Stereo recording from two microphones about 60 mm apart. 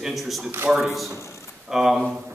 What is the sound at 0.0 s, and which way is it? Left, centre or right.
A man's voice, centre.